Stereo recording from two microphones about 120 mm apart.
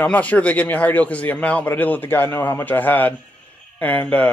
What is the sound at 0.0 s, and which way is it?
Speech, 10° left (ahead or behind).